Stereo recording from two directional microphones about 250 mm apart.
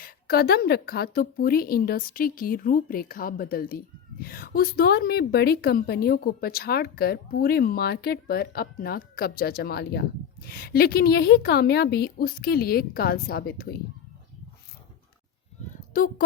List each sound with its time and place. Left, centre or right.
0.0 s a woman's voice: left
15.9 s speech: left